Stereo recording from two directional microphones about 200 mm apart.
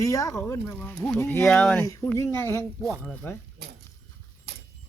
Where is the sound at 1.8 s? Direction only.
15° left (ahead or behind).